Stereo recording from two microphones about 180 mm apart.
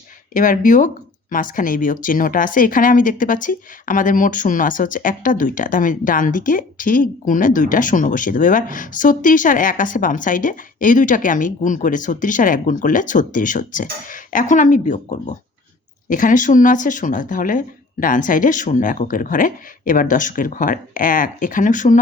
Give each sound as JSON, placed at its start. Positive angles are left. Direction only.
{"t": 0.3, "sound": "speech", "side_deg": 45}